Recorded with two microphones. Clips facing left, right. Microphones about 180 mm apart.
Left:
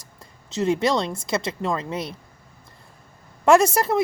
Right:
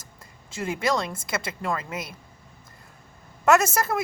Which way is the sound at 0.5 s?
25° left (ahead or behind).